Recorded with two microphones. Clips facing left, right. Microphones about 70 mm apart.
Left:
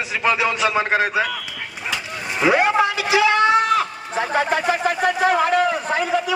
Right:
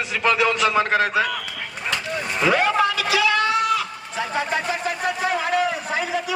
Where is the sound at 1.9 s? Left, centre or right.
Centre; by 4.4 s left.